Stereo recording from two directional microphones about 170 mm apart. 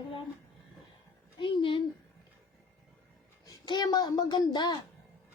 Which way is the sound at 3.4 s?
25° left (ahead or behind).